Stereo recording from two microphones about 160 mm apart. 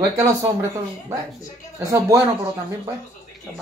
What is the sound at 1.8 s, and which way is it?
Speech, 20° right (ahead or behind).